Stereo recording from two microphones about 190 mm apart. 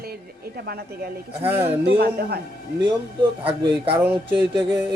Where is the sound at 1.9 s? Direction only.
55° right (ahead or behind).